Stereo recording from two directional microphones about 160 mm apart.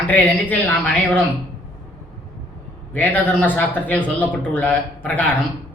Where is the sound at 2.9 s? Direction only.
10° left (ahead or behind).